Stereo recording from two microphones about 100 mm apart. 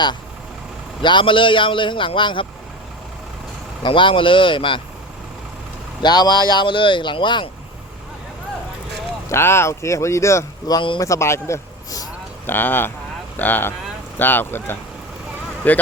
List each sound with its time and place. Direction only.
1.0 s a man's voice: 55° left (ahead or behind)
3.8 s a man's voice: 55° left (ahead or behind)
6.0 s speech: 45° left (ahead or behind)
9.3 s speech: 25° left (ahead or behind)
10.7 s speech: 50° left (ahead or behind)
11.0 s a man's voice: 30° left (ahead or behind)
12.5 s speech: 20° left (ahead or behind)